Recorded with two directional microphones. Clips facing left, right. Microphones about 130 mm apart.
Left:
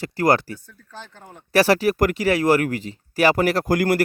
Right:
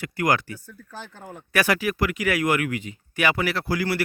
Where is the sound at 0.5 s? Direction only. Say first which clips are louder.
Right 1 dB; 5° right (ahead or behind).